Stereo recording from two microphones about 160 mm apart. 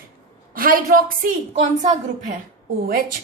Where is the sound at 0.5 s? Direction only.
60° right (ahead or behind).